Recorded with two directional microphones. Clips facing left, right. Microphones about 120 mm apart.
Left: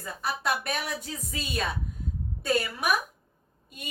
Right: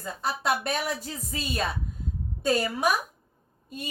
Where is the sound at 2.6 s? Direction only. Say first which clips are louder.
Right 3 dB; 25° right (ahead or behind).